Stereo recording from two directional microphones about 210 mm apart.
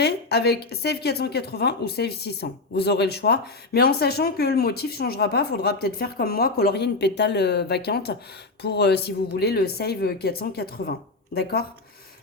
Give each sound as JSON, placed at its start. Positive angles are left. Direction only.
{"t": 0.0, "sound": "a woman's voice", "side_deg": 50}